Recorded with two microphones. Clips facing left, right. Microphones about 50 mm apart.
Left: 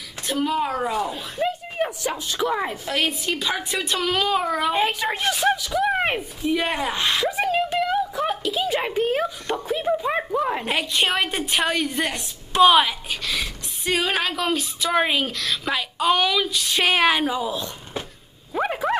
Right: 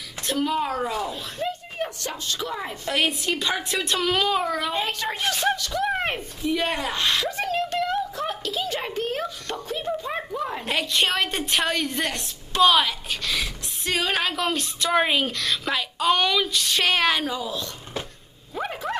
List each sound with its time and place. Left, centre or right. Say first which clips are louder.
0.3 s speech: left 1 dB; centre
2.7 s a woman's voice: even; centre
18.5 s dog: left 6 dB; centre